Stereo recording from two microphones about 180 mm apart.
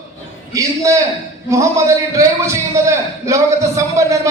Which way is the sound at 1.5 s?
15° right (ahead or behind).